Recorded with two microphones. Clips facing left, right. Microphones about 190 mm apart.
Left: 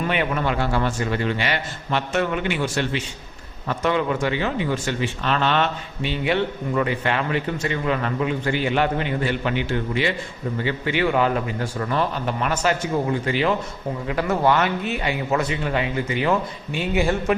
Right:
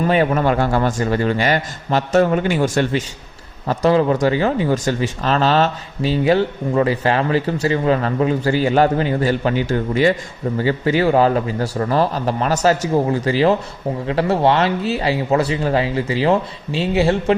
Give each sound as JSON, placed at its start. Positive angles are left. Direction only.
{"t": 0.0, "sound": "speech", "side_deg": -40}